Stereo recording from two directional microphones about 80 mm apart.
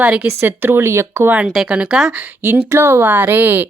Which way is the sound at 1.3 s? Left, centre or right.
Centre.